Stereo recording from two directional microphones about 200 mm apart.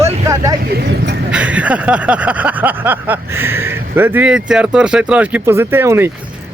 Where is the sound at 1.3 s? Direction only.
5° right (ahead or behind).